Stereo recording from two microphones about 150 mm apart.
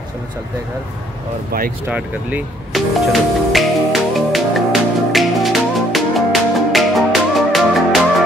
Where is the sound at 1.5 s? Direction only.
75° right (ahead or behind).